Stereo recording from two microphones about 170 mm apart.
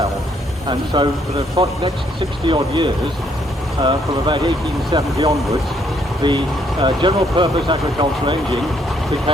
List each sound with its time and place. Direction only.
0.9 s speech: 25° right (ahead or behind)